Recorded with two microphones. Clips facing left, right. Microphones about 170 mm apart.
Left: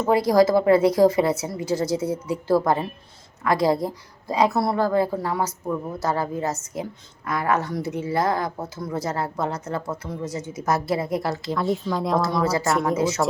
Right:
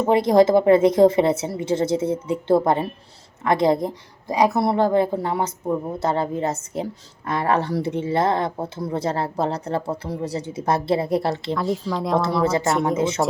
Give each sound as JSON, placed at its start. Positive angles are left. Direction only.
{"t": 0.0, "sound": "speech", "side_deg": -25}
{"t": 11.5, "sound": "speech", "side_deg": 0}
{"t": 12.2, "sound": "speech", "side_deg": -30}